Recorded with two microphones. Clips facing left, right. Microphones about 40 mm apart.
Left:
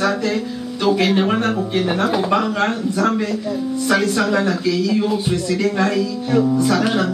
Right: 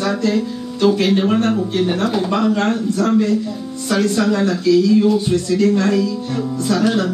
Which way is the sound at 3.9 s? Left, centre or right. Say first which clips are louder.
Right 1 dB; centre.